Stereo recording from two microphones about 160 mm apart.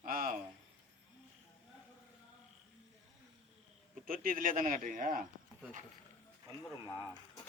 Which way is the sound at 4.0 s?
60° right (ahead or behind).